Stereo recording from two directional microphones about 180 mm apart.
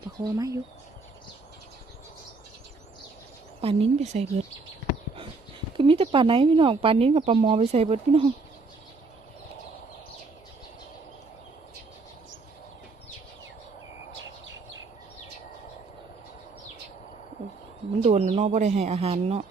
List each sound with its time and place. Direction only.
0.3 s speech: 20° right (ahead or behind)
3.6 s speech: 30° right (ahead or behind)
5.7 s speech: 30° right (ahead or behind)
18.0 s speech: 35° right (ahead or behind)